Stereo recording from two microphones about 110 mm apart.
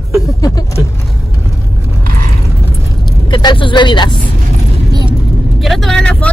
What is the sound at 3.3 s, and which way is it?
Speech, 45° left (ahead or behind).